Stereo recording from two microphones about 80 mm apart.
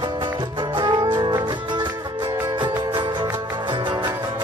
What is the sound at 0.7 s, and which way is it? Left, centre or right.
Music, right.